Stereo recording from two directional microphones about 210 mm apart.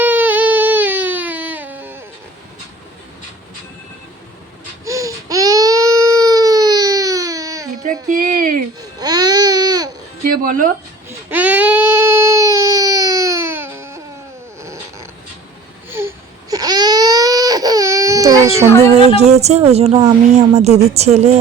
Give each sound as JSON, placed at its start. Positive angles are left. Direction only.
{"t": 0.0, "sound": "a sound", "side_deg": -10}
{"t": 4.9, "sound": "baby cry", "side_deg": -15}
{"t": 8.1, "sound": "a sound", "side_deg": -40}
{"t": 9.0, "sound": "baby cry", "side_deg": -20}
{"t": 10.3, "sound": "a sound", "side_deg": -40}
{"t": 11.3, "sound": "baby cry", "side_deg": -5}
{"t": 14.6, "sound": "cat", "side_deg": -15}
{"t": 15.9, "sound": "baby cry", "side_deg": -10}
{"t": 18.9, "sound": "a woman's voice", "side_deg": -30}